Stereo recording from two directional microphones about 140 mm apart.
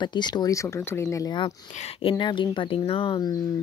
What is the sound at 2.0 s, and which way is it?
Speech, 35° left (ahead or behind).